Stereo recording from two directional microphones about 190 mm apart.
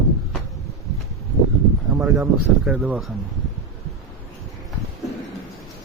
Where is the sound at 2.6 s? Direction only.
5° right (ahead or behind).